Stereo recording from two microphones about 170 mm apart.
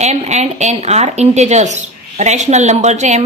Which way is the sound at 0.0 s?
40° right (ahead or behind).